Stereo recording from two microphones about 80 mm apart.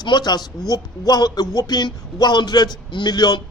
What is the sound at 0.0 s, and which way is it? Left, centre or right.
Speech, left.